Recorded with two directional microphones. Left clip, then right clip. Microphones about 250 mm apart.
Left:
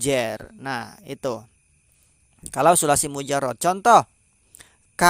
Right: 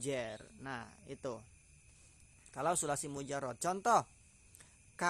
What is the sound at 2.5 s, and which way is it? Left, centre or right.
Speech, left.